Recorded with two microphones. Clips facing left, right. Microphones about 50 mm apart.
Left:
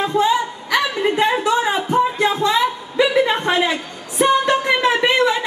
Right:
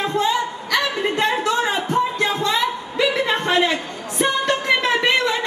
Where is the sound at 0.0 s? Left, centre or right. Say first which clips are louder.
Left 3 dB; centre.